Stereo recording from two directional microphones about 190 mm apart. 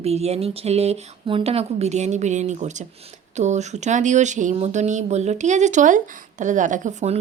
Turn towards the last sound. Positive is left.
turn(degrees=-40)  # may be behind; listen again after turning